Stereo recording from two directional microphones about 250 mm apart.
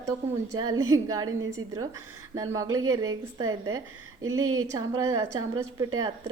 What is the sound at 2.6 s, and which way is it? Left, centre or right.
Speech, right.